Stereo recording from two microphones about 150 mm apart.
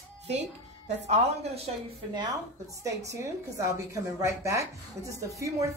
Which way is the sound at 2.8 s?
20° right (ahead or behind).